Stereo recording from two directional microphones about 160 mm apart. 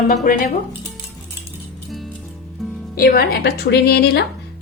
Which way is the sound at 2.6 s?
Centre (ahead or behind).